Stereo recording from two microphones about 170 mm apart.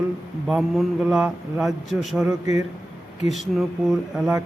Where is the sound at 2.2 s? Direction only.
20° right (ahead or behind).